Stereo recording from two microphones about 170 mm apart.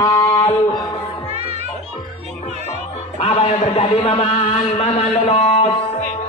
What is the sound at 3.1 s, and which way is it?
A man's voice, 35° left (ahead or behind).